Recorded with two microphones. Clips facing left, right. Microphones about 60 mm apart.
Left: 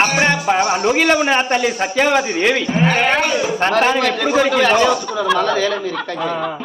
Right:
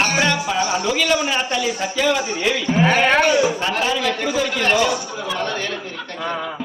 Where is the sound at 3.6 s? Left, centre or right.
Left.